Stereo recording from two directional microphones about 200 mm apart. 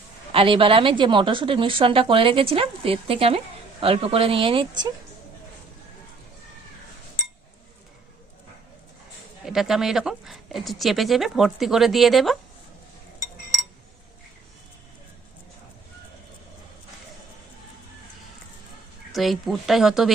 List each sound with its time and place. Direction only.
0.3 s a woman's voice: 25° right (ahead or behind)
9.4 s speech: centre (ahead or behind)
19.1 s speech: centre (ahead or behind)